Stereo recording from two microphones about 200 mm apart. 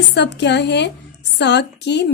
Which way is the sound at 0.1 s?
60° left (ahead or behind).